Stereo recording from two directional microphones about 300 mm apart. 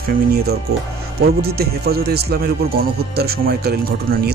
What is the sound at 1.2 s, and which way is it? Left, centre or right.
A man's voice, right.